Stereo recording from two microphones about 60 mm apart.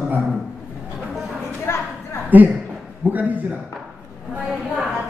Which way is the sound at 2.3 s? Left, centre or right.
Right.